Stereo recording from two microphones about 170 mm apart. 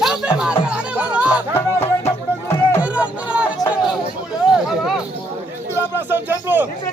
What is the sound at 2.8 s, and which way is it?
Music, 5° right (ahead or behind).